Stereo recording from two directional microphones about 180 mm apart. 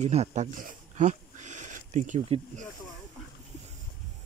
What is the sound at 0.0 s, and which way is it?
Speech, 40° right (ahead or behind).